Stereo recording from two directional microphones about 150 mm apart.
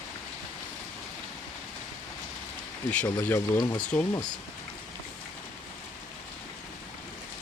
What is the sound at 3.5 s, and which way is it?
Speech, 25° left (ahead or behind).